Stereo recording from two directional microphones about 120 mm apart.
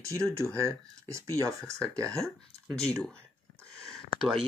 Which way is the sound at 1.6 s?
5° left (ahead or behind).